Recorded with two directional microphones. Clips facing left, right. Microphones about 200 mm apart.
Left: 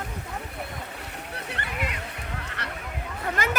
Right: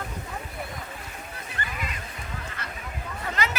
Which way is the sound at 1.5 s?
70° left (ahead or behind).